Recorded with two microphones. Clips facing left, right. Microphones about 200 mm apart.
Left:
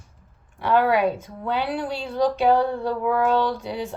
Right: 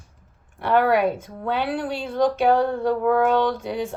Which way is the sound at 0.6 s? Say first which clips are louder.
Right 1 dB; 55° right (ahead or behind).